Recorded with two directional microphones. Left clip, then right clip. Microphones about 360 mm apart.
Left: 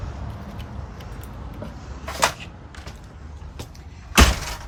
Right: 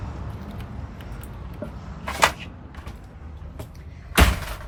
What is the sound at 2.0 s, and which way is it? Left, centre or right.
Cupboard open or close, right.